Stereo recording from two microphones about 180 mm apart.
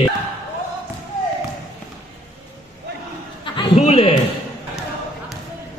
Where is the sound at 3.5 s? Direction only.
35° left (ahead or behind).